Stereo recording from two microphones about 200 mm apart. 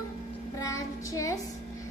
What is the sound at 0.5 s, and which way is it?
Child singing, 15° left (ahead or behind).